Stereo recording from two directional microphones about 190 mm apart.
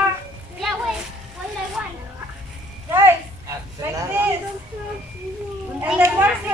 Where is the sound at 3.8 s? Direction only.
15° right (ahead or behind).